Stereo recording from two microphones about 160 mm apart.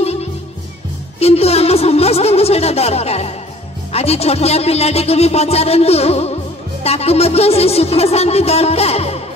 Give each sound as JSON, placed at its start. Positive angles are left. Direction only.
{"t": 0.0, "sound": "music", "side_deg": 40}
{"t": 1.2, "sound": "speech", "side_deg": 40}